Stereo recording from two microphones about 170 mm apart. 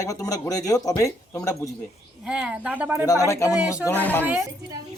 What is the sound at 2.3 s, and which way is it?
Speech, 5° right (ahead or behind).